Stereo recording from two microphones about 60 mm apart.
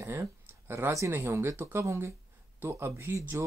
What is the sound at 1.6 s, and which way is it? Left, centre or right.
Speech, right.